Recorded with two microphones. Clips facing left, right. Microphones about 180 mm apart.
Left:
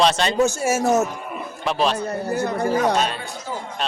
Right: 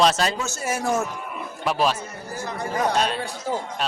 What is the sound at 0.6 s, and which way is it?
Speech, 45° left (ahead or behind).